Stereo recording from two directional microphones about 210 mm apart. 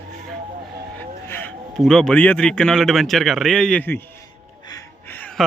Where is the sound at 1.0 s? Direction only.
10° left (ahead or behind).